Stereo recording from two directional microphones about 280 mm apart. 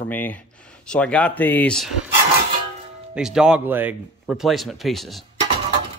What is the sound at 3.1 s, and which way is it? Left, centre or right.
A man's voice, centre.